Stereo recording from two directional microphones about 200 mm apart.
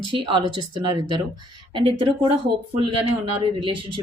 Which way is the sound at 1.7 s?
25° right (ahead or behind).